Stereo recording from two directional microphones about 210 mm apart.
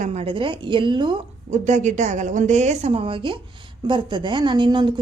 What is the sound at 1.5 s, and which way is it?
A woman's voice, 35° right (ahead or behind).